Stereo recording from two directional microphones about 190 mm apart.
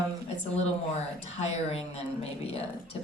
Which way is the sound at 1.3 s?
35° left (ahead or behind).